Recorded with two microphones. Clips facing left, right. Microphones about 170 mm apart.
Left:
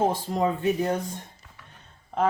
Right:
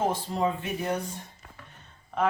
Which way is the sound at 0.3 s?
40° left (ahead or behind).